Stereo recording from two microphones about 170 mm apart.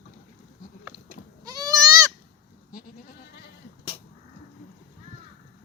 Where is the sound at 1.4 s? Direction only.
20° right (ahead or behind).